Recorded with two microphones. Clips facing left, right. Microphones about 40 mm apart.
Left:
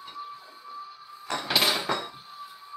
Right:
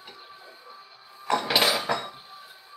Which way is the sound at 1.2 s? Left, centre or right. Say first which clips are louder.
Right 7 dB; right.